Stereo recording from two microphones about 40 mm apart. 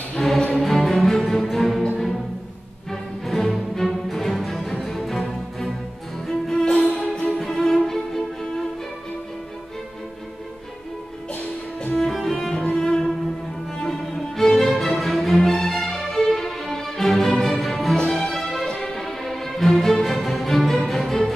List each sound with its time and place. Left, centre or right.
0.1 s music: centre
3.3 s music: centre
4.3 s music: centre
6.2 s music: centre
6.6 s music: left
7.2 s music: centre
12.0 s cello: centre
13.8 s music: centre